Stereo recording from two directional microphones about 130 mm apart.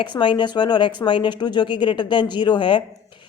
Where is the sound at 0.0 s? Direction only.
40° left (ahead or behind).